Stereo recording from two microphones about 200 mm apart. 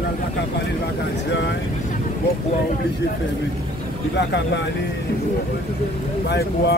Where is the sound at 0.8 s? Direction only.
60° left (ahead or behind).